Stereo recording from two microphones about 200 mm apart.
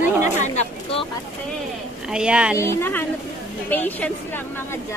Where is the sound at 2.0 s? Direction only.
5° right (ahead or behind).